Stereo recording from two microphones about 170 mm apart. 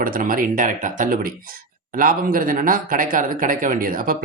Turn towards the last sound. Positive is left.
turn(degrees=-55)  # may be behind; listen again after turning